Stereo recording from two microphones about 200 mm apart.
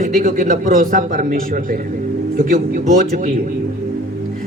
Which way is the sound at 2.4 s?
45° right (ahead or behind).